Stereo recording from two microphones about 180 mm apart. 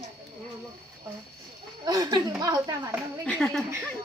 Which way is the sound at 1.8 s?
20° right (ahead or behind).